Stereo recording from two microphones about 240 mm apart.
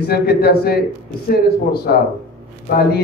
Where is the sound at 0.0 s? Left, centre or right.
Left.